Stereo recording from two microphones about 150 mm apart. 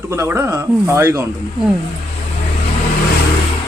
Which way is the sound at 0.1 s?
15° right (ahead or behind).